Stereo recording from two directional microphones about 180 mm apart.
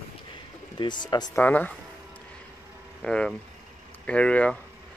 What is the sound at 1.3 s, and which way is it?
Speech, 10° left (ahead or behind).